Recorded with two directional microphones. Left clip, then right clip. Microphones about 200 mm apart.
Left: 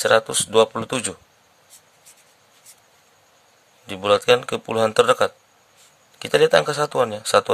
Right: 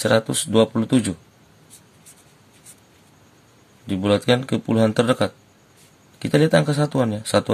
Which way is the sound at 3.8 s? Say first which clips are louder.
Left 3 dB; 25° left (ahead or behind).